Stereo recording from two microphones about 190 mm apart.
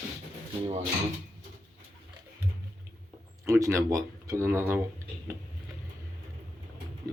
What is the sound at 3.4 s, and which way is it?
Speech, 15° right (ahead or behind).